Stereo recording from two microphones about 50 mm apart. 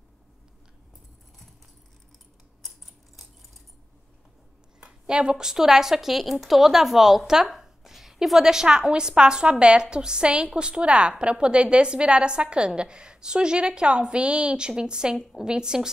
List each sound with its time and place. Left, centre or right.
4.7 s a woman's voice: centre